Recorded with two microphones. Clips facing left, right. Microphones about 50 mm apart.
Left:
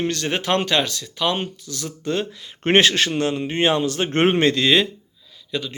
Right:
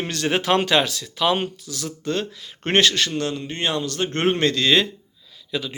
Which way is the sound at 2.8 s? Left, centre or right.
Left.